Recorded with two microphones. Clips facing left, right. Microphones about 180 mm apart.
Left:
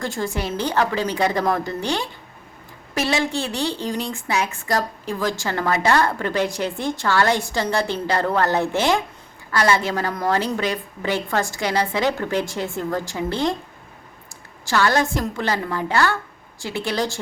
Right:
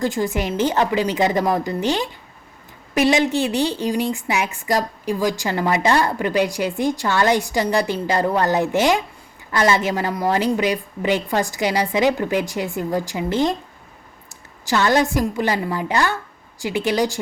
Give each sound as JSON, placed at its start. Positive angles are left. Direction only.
{"t": 0.0, "sound": "a woman's voice", "side_deg": -15}
{"t": 14.7, "sound": "a woman's voice", "side_deg": -20}